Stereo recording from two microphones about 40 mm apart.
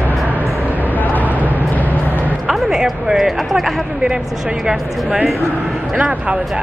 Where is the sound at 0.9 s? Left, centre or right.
Left.